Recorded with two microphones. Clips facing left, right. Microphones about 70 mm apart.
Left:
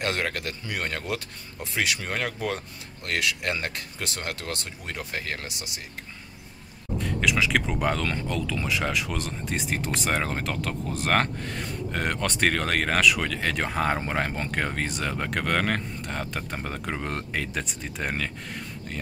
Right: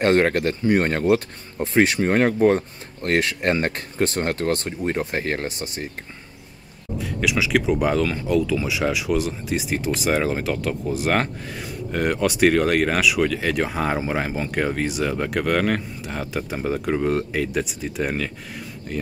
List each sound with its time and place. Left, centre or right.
0.0 s speech: right
7.0 s speech: centre